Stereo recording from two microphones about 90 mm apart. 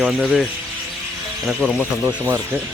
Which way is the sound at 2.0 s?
25° right (ahead or behind).